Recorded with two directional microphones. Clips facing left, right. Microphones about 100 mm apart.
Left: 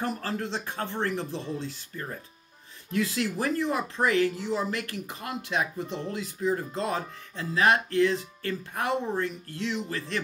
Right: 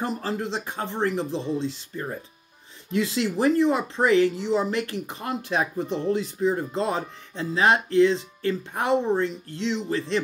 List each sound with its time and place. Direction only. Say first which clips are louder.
0.0 s speech: right 3 dB; 20° right (ahead or behind)